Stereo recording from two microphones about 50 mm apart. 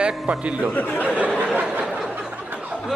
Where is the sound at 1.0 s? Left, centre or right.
Right.